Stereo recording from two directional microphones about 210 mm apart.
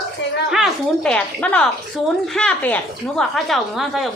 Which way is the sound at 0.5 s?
Centre (ahead or behind).